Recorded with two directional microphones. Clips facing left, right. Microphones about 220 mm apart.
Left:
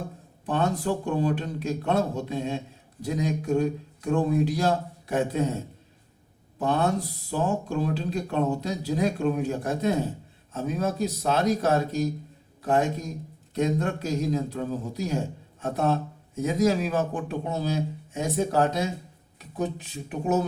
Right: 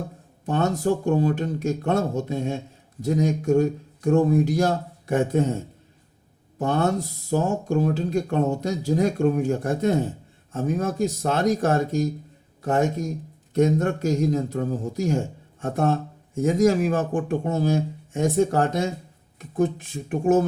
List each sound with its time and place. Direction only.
0.4 s speech: 45° right (ahead or behind)
6.6 s speech: 45° right (ahead or behind)